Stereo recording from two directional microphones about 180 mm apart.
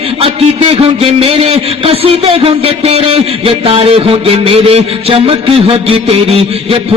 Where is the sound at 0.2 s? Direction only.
30° right (ahead or behind).